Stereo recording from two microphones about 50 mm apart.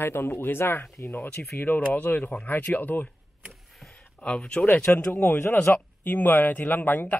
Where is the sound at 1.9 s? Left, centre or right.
Left.